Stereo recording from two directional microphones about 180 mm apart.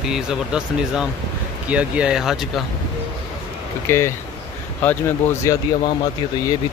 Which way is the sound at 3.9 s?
15° left (ahead or behind).